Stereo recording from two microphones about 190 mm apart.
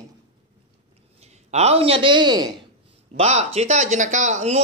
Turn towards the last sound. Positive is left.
turn(degrees=-40)  # may be behind; listen again after turning